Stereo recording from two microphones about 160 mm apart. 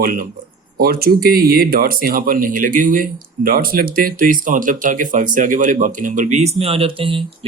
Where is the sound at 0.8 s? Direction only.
70° right (ahead or behind).